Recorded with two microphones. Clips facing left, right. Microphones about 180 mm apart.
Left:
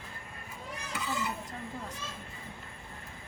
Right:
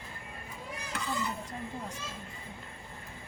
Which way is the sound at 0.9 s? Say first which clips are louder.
Even; 5° left (ahead or behind).